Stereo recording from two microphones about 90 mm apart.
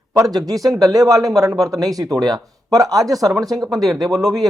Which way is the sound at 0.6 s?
Centre (ahead or behind).